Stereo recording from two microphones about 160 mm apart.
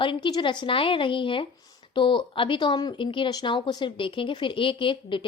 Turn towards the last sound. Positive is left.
turn(degrees=30)  # may be behind; listen again after turning